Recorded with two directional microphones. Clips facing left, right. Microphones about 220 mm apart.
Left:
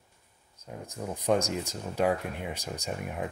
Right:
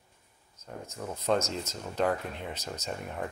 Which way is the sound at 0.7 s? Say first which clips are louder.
Left 2 dB; 15° left (ahead or behind).